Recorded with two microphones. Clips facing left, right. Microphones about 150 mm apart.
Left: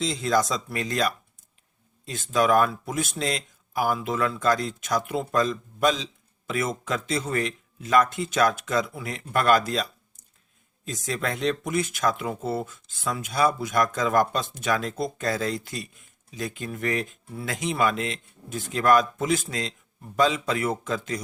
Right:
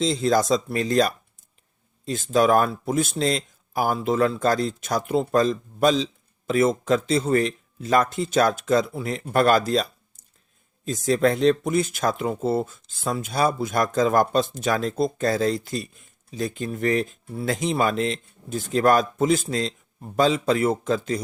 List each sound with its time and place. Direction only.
0.0 s speech: 35° right (ahead or behind)
10.8 s speech: 35° right (ahead or behind)